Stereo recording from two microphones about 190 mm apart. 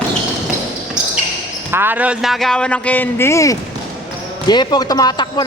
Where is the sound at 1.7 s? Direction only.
10° right (ahead or behind).